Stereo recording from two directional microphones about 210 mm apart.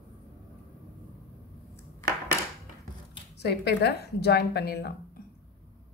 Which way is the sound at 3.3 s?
50° left (ahead or behind).